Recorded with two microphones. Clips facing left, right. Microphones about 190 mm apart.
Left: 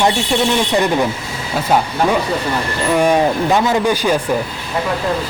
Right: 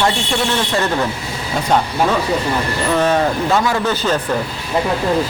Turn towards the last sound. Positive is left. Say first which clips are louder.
# left 3 dB
turn(degrees=10)  # may be behind; listen again after turning